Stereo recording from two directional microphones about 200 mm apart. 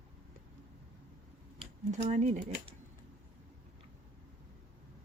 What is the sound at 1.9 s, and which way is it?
Speech, 35° right (ahead or behind).